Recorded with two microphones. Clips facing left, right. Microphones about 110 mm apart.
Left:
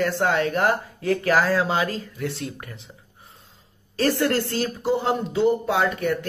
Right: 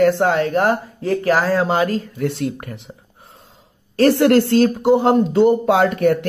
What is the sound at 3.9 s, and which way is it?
Speech, 70° right (ahead or behind).